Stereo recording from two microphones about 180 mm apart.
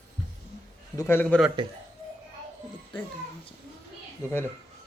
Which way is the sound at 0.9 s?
15° left (ahead or behind).